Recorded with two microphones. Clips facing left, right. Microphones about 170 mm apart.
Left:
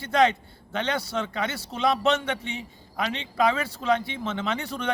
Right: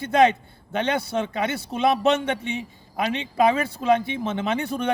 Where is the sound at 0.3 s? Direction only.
15° right (ahead or behind).